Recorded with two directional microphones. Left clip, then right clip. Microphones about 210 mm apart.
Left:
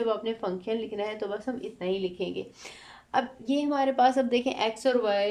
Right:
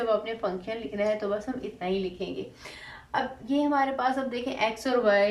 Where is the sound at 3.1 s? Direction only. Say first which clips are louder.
Left 1 dB; 50° left (ahead or behind).